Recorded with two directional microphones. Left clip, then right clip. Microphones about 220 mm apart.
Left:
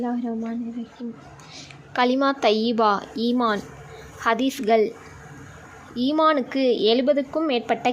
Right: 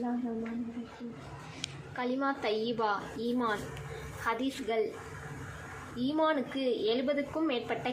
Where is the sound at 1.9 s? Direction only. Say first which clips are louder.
Left 13 dB; 50° left (ahead or behind).